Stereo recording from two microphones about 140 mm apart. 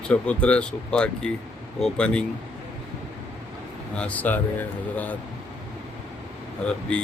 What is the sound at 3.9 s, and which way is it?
Speech, 10° left (ahead or behind).